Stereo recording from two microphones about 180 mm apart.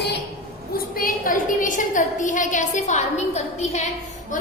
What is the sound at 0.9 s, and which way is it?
A woman's voice, 50° left (ahead or behind).